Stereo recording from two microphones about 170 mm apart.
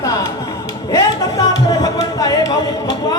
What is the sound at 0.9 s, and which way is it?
Music, 20° left (ahead or behind).